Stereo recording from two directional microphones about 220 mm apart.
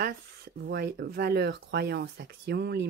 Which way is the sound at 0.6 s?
45° right (ahead or behind).